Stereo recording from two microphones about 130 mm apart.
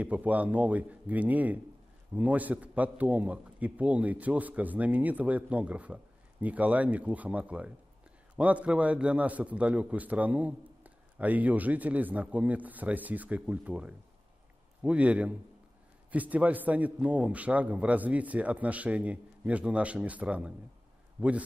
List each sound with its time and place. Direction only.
0.0 s a man's voice: 10° right (ahead or behind)